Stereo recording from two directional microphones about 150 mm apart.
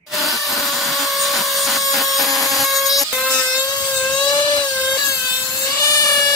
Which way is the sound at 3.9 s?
5° left (ahead or behind).